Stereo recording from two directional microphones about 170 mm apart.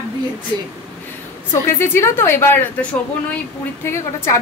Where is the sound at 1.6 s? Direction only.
15° left (ahead or behind).